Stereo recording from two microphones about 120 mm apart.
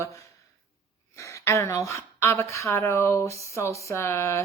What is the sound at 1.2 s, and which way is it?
Speech, 25° left (ahead or behind).